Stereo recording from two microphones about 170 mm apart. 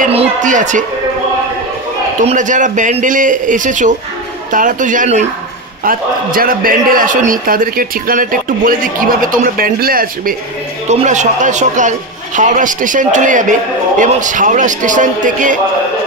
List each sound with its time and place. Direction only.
0.1 s speech: 40° right (ahead or behind)
2.2 s a man's voice: 45° right (ahead or behind)
5.9 s a man's voice: 55° right (ahead or behind)
10.9 s a man's voice: 45° right (ahead or behind)